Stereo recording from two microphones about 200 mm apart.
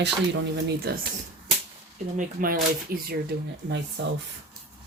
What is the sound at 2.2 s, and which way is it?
Speech, 40° right (ahead or behind).